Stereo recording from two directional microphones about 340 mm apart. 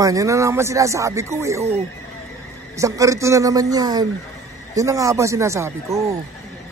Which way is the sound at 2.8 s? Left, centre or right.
Centre.